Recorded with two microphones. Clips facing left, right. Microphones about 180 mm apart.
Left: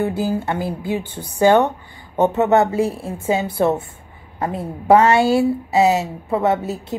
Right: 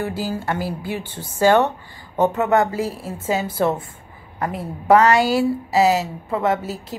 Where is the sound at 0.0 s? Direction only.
20° left (ahead or behind).